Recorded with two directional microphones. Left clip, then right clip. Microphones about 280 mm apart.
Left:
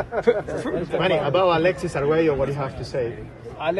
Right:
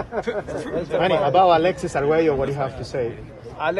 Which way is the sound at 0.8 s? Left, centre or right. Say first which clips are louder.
Right 3 dB; right.